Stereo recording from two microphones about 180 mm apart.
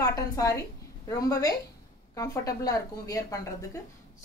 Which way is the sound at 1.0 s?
20° left (ahead or behind).